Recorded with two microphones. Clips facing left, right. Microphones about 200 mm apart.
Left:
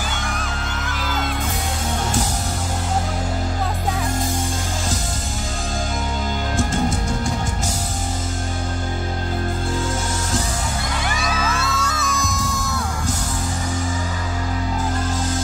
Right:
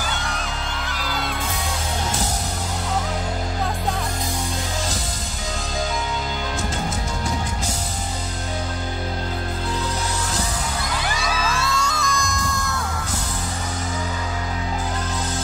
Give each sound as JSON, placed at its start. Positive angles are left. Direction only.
{"t": 11.5, "sound": "music", "side_deg": 5}